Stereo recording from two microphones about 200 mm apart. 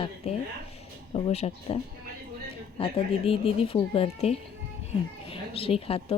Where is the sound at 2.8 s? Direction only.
25° left (ahead or behind).